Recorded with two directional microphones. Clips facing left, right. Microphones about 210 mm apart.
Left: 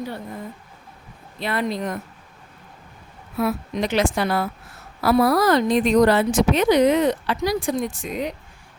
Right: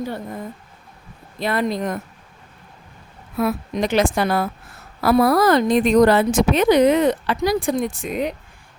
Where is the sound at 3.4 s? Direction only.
45° right (ahead or behind).